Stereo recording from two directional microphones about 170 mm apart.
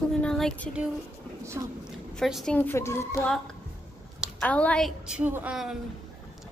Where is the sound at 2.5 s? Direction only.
10° left (ahead or behind).